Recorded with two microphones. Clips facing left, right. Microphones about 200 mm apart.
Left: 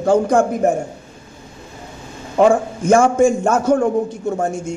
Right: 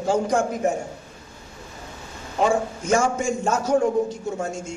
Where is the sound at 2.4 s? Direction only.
55° left (ahead or behind).